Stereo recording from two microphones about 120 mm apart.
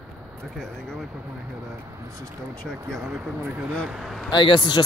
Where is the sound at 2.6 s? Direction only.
Centre (ahead or behind).